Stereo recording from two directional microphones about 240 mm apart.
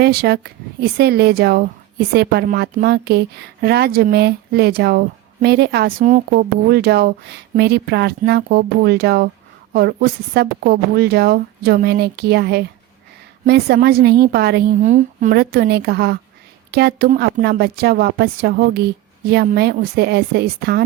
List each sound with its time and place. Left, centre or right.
0.0 s speech: right
6.0 s speech: right